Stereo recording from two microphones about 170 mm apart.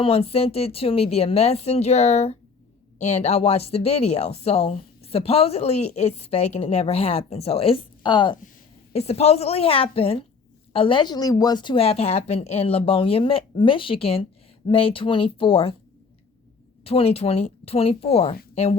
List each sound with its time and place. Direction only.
0.0 s speech: 35° left (ahead or behind)
8.9 s speech: 40° left (ahead or behind)
16.8 s speech: 35° left (ahead or behind)